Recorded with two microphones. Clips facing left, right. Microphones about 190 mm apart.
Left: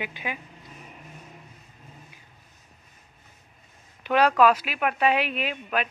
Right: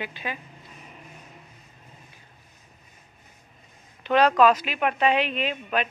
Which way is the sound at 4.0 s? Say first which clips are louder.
Right 1 dB; 10° left (ahead or behind).